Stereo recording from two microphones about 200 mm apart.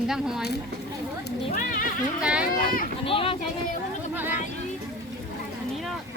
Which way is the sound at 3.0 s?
25° left (ahead or behind).